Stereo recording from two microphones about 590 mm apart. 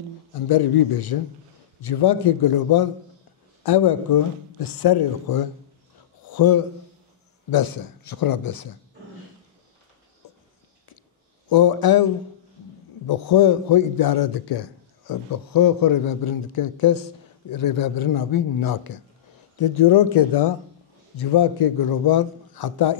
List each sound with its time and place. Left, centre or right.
0.5 s a man's voice: left
11.4 s a man's voice: left